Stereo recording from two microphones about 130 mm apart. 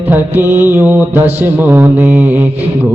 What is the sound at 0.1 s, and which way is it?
Music, 15° right (ahead or behind).